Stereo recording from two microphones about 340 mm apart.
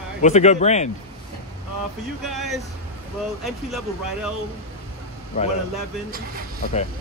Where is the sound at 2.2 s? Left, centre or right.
Centre.